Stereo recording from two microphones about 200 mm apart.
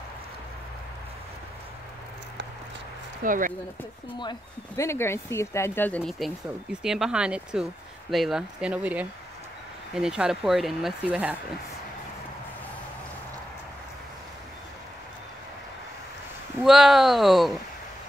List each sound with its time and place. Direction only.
3.3 s speech: 40° right (ahead or behind)
4.2 s speech: 20° left (ahead or behind); by 11.3 s 5° right (ahead or behind)
16.6 s speech: centre (ahead or behind)